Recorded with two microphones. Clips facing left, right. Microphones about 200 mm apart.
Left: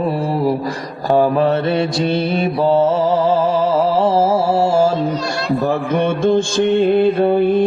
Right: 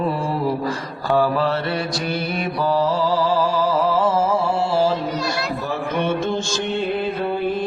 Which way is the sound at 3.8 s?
35° left (ahead or behind).